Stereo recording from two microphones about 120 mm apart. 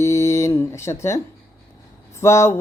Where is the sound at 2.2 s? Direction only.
25° left (ahead or behind).